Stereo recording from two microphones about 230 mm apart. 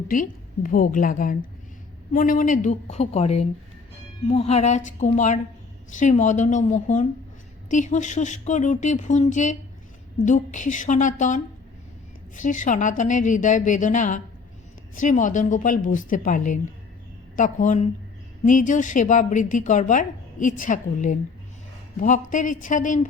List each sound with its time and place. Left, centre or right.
0.1 s a woman's voice: left
12.4 s a woman's voice: left